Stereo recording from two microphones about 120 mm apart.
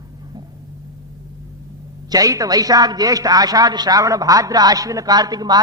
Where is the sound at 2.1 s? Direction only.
30° right (ahead or behind).